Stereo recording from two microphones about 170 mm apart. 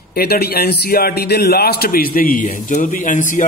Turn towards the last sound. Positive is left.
turn(degrees=50)  # may be behind; listen again after turning